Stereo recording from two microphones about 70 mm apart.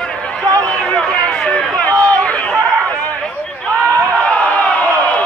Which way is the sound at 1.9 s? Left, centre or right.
Right.